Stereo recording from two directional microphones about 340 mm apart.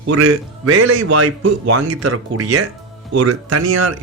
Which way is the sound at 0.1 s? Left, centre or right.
Right.